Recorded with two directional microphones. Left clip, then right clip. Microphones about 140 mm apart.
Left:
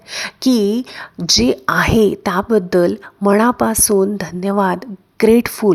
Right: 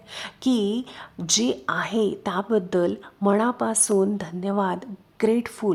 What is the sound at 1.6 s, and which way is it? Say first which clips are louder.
A woman's voice: left 10 dB; 40° left (ahead or behind).